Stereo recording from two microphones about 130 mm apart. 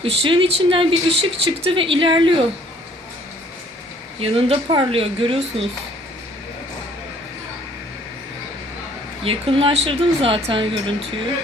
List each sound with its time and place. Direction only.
0.0 s speech: 45° right (ahead or behind)
4.2 s speech: 45° right (ahead or behind)
9.2 s speech: 45° right (ahead or behind)